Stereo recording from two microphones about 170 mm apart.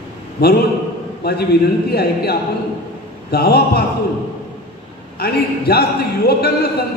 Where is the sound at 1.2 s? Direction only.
70° left (ahead or behind).